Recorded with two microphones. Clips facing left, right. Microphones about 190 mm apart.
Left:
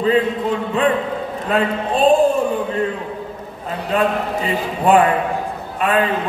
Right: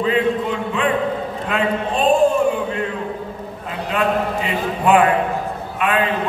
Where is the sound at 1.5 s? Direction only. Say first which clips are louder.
Left 4 dB; 35° left (ahead or behind).